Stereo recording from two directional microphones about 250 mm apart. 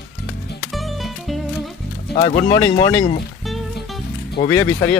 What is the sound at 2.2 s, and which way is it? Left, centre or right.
Speech, left.